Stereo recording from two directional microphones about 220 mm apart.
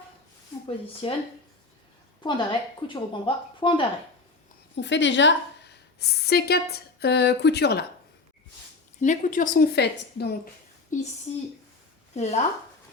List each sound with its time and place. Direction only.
1.0 s speech: 25° left (ahead or behind)
2.2 s speech: 20° left (ahead or behind)
4.8 s a woman's voice: 55° left (ahead or behind)
9.0 s a woman's voice: 35° left (ahead or behind)
10.9 s speech: 35° left (ahead or behind)
12.1 s speech: 30° left (ahead or behind)